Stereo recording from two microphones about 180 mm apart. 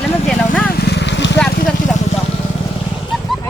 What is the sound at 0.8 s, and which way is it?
Vehicle, 70° left (ahead or behind).